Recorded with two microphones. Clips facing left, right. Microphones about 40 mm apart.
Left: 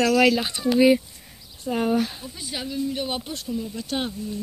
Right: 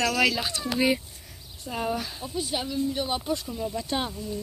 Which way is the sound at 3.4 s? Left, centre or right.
Right.